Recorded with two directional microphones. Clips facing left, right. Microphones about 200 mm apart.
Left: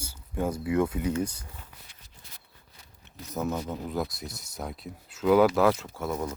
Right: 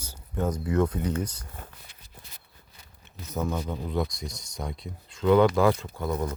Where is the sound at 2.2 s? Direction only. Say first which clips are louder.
Right 5 dB; 60° right (ahead or behind).